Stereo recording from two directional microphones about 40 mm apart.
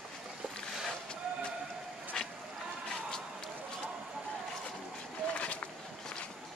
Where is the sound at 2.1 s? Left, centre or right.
Centre.